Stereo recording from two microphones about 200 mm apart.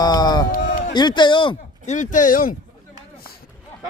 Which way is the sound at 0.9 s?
20° left (ahead or behind).